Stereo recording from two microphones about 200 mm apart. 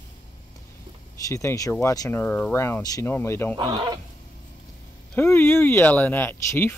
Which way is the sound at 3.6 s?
20° right (ahead or behind).